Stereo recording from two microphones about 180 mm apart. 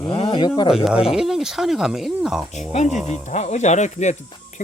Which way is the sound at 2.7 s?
40° left (ahead or behind).